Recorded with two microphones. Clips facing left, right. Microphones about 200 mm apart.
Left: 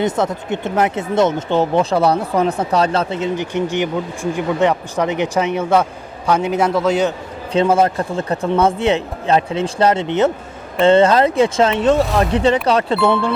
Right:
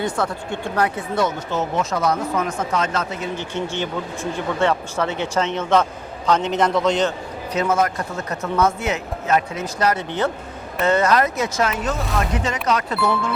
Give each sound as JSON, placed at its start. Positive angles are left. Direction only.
{"t": 0.0, "sound": "speech", "side_deg": 20}
{"t": 3.3, "sound": "speech", "side_deg": 15}
{"t": 7.5, "sound": "speech", "side_deg": 30}